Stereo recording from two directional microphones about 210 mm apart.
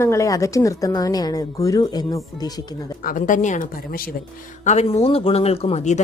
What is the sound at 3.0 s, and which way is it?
Speech, 40° left (ahead or behind).